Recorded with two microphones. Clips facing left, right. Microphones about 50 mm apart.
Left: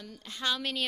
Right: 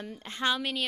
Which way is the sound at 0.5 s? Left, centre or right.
Centre.